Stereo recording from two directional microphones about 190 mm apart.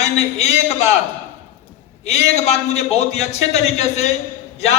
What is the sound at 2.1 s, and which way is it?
A man's voice, 35° left (ahead or behind).